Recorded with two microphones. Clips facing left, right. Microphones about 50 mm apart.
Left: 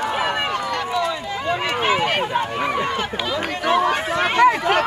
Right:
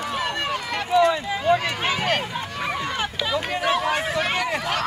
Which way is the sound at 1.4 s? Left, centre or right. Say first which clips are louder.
Even; left.